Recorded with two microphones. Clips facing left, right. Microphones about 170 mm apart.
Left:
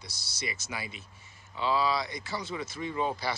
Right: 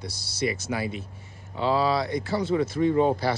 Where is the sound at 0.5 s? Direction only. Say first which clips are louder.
Right 11 dB; 60° right (ahead or behind).